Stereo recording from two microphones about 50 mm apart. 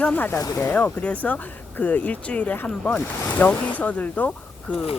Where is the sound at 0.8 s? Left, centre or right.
Left.